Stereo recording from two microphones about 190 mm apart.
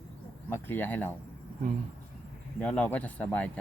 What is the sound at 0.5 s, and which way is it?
Speech, 10° left (ahead or behind).